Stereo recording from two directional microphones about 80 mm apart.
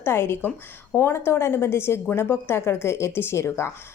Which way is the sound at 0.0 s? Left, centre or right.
Left.